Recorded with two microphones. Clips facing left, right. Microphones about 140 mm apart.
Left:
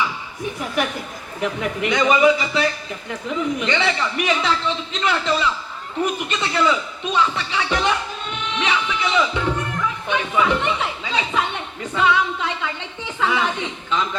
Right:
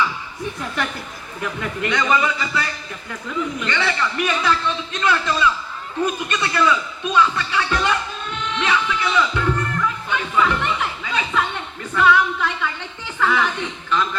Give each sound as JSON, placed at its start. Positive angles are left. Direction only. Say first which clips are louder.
{"t": 1.4, "sound": "a man's voice", "louder": "left 3 dB", "side_deg": 20}